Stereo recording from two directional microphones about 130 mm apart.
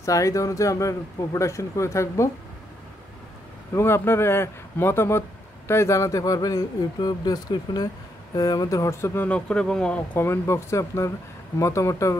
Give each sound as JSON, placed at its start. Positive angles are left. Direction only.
{"t": 0.0, "sound": "a man's voice", "side_deg": 25}
{"t": 3.7, "sound": "a man's voice", "side_deg": 20}
{"t": 10.1, "sound": "a man's voice", "side_deg": 20}